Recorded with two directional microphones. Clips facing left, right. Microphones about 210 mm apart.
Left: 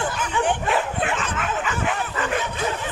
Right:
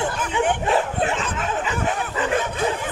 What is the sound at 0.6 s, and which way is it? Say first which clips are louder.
Bow-wow: right 2 dB; 35° right (ahead or behind).